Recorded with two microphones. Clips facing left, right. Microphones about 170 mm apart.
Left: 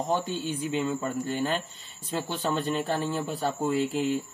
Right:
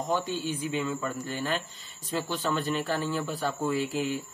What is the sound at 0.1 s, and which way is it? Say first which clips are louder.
Speech: right 1 dB; 30° left (ahead or behind).